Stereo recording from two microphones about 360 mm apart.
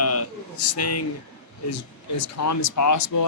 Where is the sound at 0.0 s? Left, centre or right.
Left.